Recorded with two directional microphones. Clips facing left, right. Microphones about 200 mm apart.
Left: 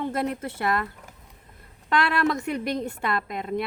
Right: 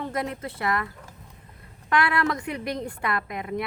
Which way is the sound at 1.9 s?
25° left (ahead or behind).